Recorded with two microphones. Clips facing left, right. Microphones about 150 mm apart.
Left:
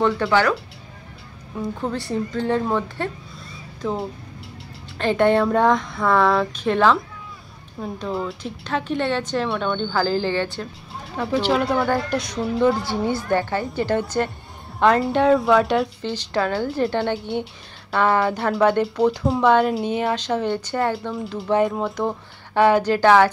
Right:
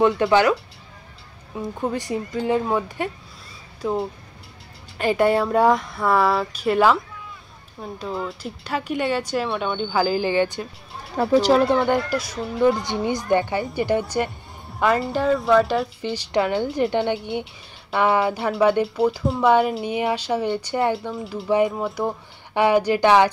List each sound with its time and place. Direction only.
0.0 s speech: 15° right (ahead or behind)
1.8 s speech: 15° right (ahead or behind)
8.0 s speech: centre (ahead or behind)
11.1 s speech: 40° right (ahead or behind)
12.1 s a woman's voice: 5° right (ahead or behind)
16.0 s speech: 10° right (ahead or behind)